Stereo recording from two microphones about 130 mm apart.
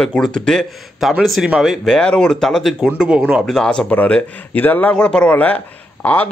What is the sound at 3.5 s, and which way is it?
Speech, 5° left (ahead or behind).